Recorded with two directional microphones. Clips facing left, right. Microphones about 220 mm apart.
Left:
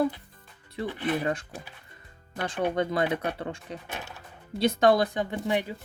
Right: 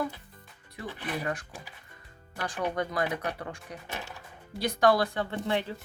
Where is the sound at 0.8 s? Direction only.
25° left (ahead or behind).